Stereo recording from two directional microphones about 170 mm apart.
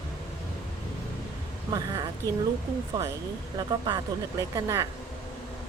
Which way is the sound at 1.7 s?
20° right (ahead or behind).